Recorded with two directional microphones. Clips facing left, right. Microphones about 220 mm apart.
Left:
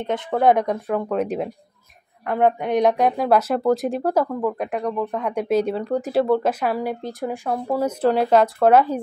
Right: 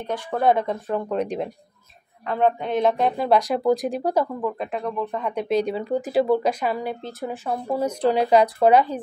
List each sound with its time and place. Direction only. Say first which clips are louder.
0.0 s speech: left 3 dB; 20° left (ahead or behind)
3.2 s speech: left 1 dB; 5° left (ahead or behind)
7.4 s speech: left 1 dB; 5° left (ahead or behind)